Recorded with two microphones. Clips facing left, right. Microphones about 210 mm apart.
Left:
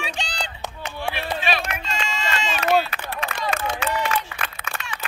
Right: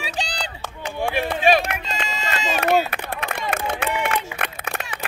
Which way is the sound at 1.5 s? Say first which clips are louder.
Right 10 dB; 45° right (ahead or behind).